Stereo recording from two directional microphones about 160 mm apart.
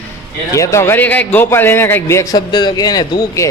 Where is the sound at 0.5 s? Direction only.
20° left (ahead or behind).